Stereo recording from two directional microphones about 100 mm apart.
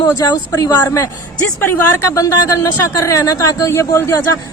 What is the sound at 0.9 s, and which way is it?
A woman's voice, 25° left (ahead or behind).